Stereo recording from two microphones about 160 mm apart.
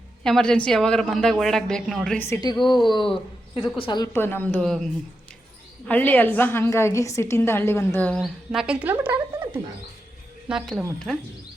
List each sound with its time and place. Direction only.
0.2 s a woman's voice: 5° left (ahead or behind)
2.1 s a woman's voice: 15° left (ahead or behind)
2.6 s a woman's voice: 30° left (ahead or behind)
4.1 s a woman's voice: 15° left (ahead or behind); by 9.6 s 10° right (ahead or behind)
10.5 s a woman's voice: centre (ahead or behind)